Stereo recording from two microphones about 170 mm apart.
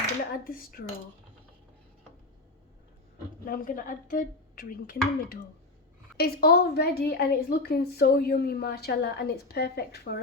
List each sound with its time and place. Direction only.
0.4 s speech: 60° left (ahead or behind)
3.4 s speech: 55° left (ahead or behind)
6.1 s a woman's voice: 65° left (ahead or behind)